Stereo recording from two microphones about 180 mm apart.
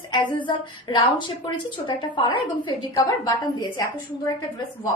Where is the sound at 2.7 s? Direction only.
25° left (ahead or behind).